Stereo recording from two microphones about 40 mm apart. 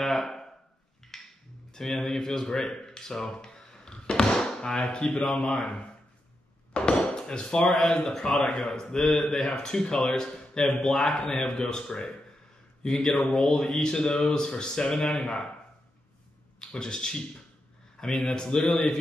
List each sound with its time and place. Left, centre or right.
0.0 s a sound: centre
1.7 s speech: centre
2.9 s a sound: centre
4.8 s speech: left
6.7 s a sound: left
8.0 s speech: centre
8.4 s speech: centre
11.5 s speech: left
16.5 s a man's voice: centre